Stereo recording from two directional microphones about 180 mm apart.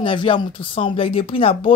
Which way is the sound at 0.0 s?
30° left (ahead or behind).